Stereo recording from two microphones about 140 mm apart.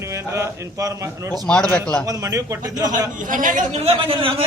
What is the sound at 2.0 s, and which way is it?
Speech, 25° right (ahead or behind).